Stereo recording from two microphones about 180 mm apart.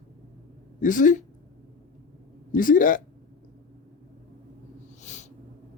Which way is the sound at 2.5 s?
50° left (ahead or behind).